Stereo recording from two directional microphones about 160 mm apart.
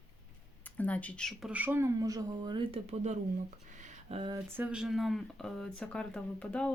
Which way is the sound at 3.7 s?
50° right (ahead or behind).